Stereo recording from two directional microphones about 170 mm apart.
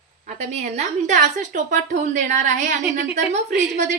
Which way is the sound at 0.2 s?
45° right (ahead or behind).